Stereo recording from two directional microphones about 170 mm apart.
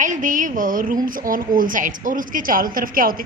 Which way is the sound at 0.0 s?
50° right (ahead or behind).